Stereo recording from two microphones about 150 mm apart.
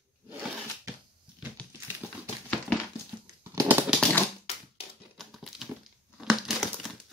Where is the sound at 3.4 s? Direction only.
20° right (ahead or behind).